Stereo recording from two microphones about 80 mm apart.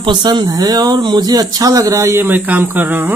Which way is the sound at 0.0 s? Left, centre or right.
Right.